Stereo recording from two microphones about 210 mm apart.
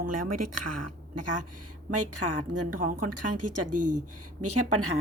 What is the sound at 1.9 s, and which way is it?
Speech, 90° right.